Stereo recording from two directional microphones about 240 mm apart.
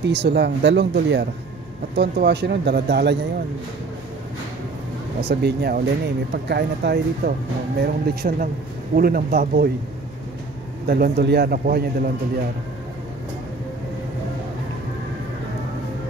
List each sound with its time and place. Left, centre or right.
0.1 s speech: right
5.2 s a man's voice: right
10.9 s a man's voice: right